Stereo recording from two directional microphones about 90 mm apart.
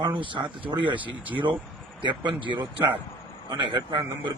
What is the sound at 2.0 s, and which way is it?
Speech, 60° right (ahead or behind).